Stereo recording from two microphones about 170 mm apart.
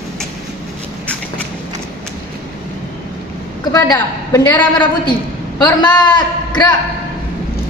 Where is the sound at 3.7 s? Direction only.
15° left (ahead or behind).